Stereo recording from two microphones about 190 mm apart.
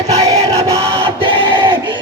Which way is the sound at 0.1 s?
35° right (ahead or behind).